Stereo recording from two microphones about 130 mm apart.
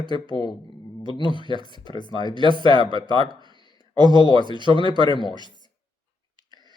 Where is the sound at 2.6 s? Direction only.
35° right (ahead or behind).